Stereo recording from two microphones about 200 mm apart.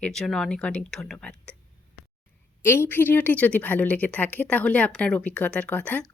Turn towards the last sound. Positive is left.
turn(degrees=5)  # may be behind; listen again after turning